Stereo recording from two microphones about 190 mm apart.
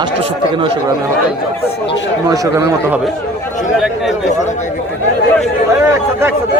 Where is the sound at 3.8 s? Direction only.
Centre (ahead or behind).